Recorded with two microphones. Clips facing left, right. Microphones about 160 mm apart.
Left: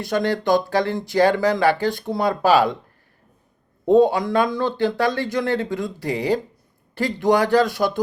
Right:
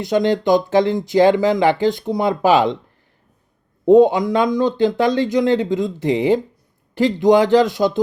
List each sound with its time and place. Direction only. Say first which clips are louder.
0.0 s speech: right 5 dB; 20° right (ahead or behind)
3.8 s speech: right 4 dB; 20° right (ahead or behind)